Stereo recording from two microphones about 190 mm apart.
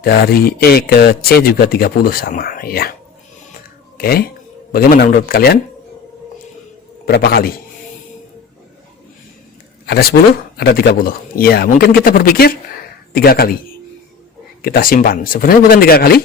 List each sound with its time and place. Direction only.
0.0 s speech: 55° left (ahead or behind)
3.9 s a sound: 55° left (ahead or behind)
4.7 s speech: 50° left (ahead or behind)
7.0 s speech: 55° left (ahead or behind)
9.8 s speech: 55° left (ahead or behind)
14.6 s speech: 50° left (ahead or behind)